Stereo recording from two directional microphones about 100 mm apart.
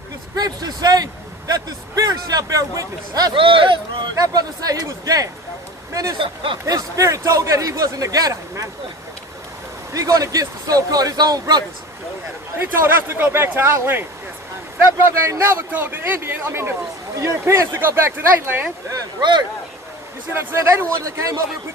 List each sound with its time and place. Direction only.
0.4 s speech: 40° right (ahead or behind)
3.3 s speech: 60° right (ahead or behind)
4.2 s speech: 40° right (ahead or behind)
6.1 s speech: 60° right (ahead or behind)
6.6 s speech: 30° right (ahead or behind)
9.9 s speech: 35° right (ahead or behind)
12.5 s speech: 20° right (ahead or behind)
18.9 s speech: 45° right (ahead or behind)
20.3 s speech: 25° right (ahead or behind)